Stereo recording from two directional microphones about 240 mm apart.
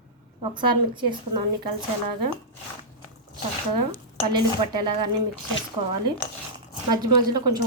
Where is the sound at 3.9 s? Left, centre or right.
Centre.